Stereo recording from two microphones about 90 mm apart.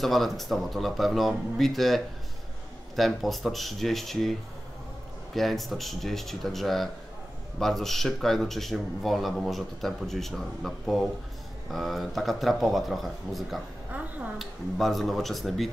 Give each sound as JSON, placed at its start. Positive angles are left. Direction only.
{"t": 0.0, "sound": "speech", "side_deg": 0}
{"t": 3.0, "sound": "speech", "side_deg": 0}
{"t": 13.9, "sound": "a sound", "side_deg": -15}
{"t": 14.4, "sound": "speech", "side_deg": 0}